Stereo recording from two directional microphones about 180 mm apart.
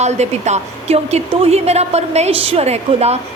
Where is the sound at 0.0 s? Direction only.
40° right (ahead or behind).